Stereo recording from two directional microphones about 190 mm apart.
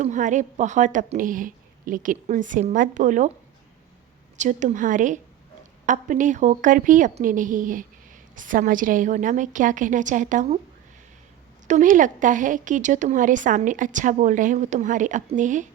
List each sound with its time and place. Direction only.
0.0 s speech: 40° right (ahead or behind)
4.4 s a woman's voice: 40° right (ahead or behind)
11.7 s speech: 45° right (ahead or behind)